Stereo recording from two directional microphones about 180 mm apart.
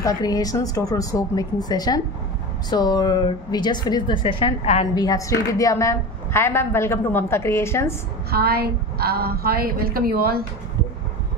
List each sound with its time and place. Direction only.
0.0 s a woman's voice: 20° left (ahead or behind)
4.9 s a woman's voice: 20° left (ahead or behind)
8.3 s a woman's voice: 60° right (ahead or behind)